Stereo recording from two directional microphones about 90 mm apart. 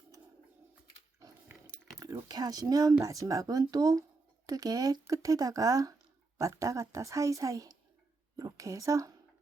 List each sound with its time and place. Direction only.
2.2 s speech: 45° right (ahead or behind)